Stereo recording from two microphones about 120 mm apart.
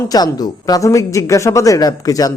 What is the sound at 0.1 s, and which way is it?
A woman's voice, 35° left (ahead or behind).